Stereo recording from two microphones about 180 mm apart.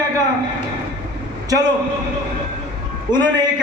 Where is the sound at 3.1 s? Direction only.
25° right (ahead or behind).